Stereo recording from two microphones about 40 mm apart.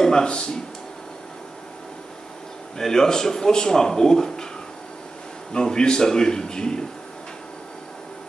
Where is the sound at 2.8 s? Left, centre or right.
Centre.